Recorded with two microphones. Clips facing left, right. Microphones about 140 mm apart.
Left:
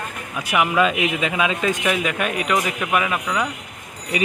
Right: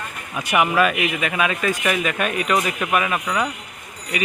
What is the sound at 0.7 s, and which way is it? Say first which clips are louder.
A man's voice: even; 20° left (ahead or behind).